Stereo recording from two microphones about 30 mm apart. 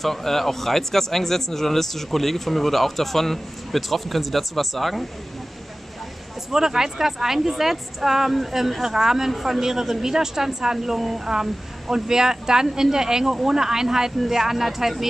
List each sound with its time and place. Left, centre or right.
0.0 s speech: centre
6.5 s speech: centre
11.9 s speech: centre